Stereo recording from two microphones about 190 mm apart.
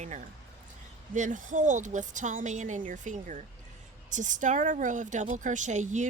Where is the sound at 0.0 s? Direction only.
40° right (ahead or behind).